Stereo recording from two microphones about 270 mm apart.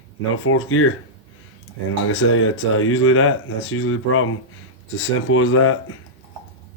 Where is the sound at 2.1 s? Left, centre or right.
Left.